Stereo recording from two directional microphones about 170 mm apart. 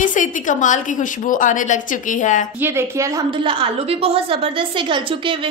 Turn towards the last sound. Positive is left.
turn(degrees=-30)  # may be behind; listen again after turning